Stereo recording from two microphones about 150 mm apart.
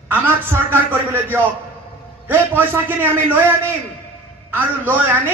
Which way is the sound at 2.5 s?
15° right (ahead or behind).